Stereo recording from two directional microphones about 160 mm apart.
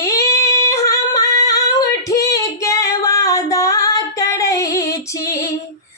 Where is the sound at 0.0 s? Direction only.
20° left (ahead or behind).